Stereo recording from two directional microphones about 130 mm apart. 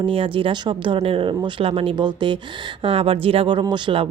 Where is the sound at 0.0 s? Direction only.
40° right (ahead or behind).